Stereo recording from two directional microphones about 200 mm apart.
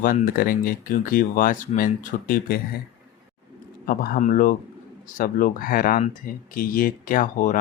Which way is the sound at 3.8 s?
50° left (ahead or behind).